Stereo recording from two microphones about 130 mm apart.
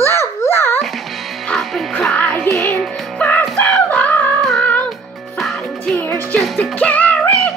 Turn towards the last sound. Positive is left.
turn(degrees=5)  # may be behind; listen again after turning